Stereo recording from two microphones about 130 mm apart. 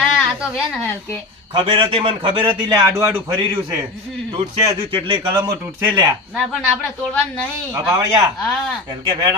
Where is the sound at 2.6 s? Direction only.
30° right (ahead or behind).